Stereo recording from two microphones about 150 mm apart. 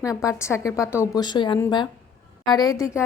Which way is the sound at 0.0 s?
20° left (ahead or behind).